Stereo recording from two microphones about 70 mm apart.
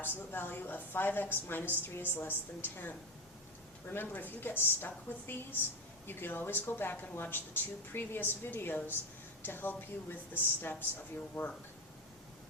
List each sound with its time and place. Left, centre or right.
0.0 s a woman's voice: left